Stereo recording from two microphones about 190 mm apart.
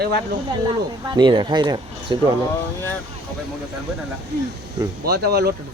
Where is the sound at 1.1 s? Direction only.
25° right (ahead or behind).